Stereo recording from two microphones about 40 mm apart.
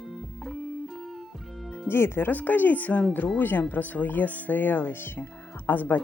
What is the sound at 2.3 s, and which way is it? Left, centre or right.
Speech, left.